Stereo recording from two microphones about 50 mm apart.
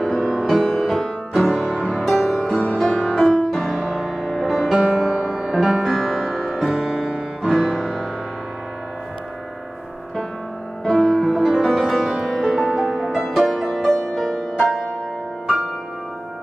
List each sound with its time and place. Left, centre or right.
0.0 s music: centre
5.6 s music: centre
5.9 s music: centre
10.8 s music: centre
12.7 s music: centre
13.1 s music: centre
13.7 s music: centre